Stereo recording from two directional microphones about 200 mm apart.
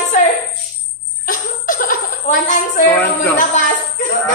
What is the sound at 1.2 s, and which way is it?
Chuckle, 45° left (ahead or behind).